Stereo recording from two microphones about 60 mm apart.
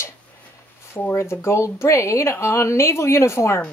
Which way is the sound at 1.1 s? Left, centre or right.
Left.